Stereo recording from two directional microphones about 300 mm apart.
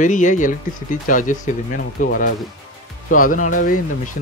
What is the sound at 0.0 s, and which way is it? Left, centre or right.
Speech, left.